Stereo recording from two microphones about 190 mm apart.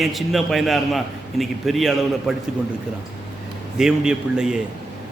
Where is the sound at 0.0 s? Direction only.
Centre (ahead or behind).